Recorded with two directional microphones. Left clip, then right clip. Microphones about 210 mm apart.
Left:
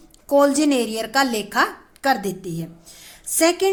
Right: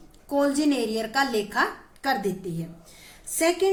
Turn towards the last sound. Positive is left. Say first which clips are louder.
# left 5 dB
turn(degrees=40)  # may be behind; listen again after turning